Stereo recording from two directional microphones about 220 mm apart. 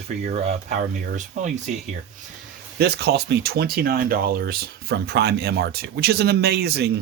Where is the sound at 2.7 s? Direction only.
45° right (ahead or behind).